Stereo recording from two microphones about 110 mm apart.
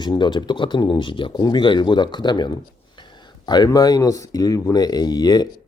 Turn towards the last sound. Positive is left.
turn(degrees=40)  # may be behind; listen again after turning